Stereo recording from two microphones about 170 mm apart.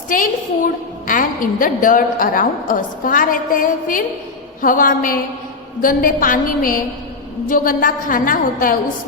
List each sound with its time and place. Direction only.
0.1 s a woman's voice: 50° left (ahead or behind)